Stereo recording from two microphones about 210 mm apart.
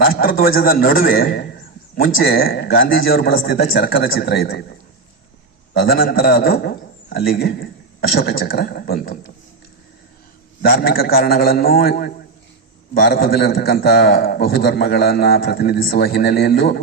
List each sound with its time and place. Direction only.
0.1 s a man's voice: 40° left (ahead or behind)
5.7 s a man's voice: 45° left (ahead or behind)
10.6 s a man's voice: 45° left (ahead or behind)